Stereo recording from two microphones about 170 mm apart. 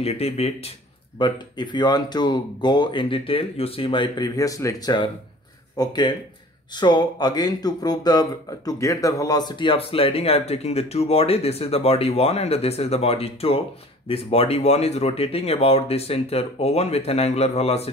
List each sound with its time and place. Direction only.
0.0 s speech: 35° left (ahead or behind)